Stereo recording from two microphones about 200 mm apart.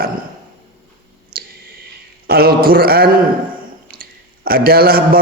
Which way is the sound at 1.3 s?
50° right (ahead or behind).